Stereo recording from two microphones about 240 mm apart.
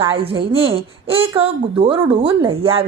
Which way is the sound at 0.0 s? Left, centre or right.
Right.